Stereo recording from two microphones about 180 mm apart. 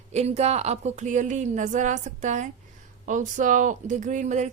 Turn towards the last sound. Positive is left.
turn(degrees=-40)  # may be behind; listen again after turning